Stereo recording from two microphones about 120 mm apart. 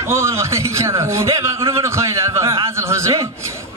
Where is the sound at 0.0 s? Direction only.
20° right (ahead or behind).